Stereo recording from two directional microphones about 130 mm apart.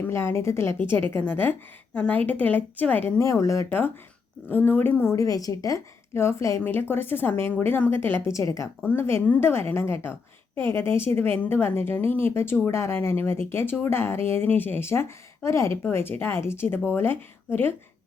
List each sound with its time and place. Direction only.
0.1 s a woman's voice: 20° left (ahead or behind)